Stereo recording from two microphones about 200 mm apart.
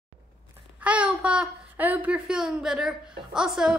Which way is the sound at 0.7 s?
5° right (ahead or behind).